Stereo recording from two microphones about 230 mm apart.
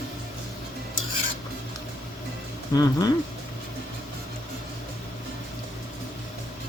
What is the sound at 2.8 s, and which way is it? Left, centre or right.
Speech, centre.